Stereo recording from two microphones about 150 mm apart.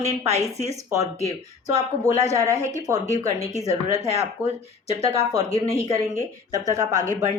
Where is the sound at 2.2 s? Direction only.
20° right (ahead or behind).